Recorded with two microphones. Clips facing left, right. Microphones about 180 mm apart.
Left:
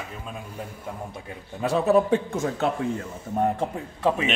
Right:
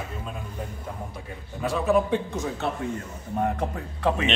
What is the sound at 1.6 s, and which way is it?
Speech, 35° left (ahead or behind).